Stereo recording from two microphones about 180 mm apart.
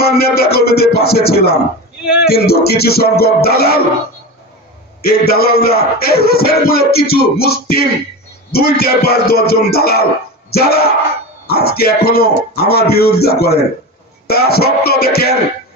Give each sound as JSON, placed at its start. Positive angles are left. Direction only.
{"t": 0.0, "sound": "speech", "side_deg": 60}
{"t": 5.0, "sound": "speech", "side_deg": 60}